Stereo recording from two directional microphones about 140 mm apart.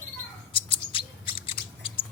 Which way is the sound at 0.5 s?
40° left (ahead or behind).